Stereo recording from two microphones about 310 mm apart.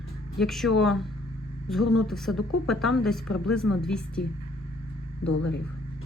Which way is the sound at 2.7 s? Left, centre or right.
Centre.